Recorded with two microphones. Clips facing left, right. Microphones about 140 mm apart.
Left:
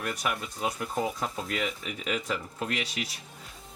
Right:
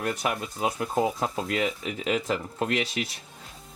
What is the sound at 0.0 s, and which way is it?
Speech, 30° right (ahead or behind).